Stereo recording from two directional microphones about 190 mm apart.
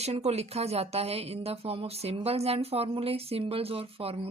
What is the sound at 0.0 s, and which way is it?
Speech, 35° right (ahead or behind).